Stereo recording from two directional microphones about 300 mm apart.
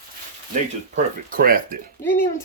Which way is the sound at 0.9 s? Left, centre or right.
Right.